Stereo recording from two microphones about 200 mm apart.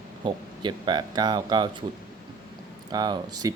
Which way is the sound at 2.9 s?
20° right (ahead or behind).